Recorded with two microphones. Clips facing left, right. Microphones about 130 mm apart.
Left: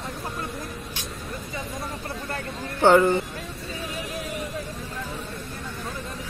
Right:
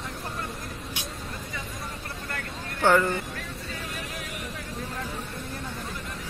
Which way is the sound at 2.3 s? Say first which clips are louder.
Left 4 dB; 20° left (ahead or behind).